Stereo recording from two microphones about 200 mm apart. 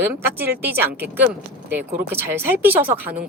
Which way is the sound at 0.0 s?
10° right (ahead or behind).